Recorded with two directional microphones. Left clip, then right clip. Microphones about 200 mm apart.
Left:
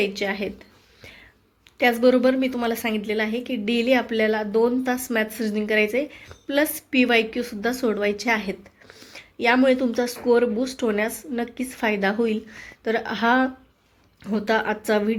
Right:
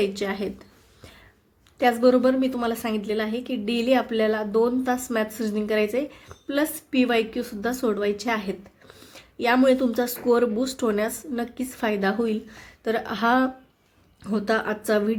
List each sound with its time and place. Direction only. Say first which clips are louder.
0.0 s a woman's voice: left 1 dB; 5° right (ahead or behind)
1.8 s a woman's voice: left 1 dB; centre (ahead or behind)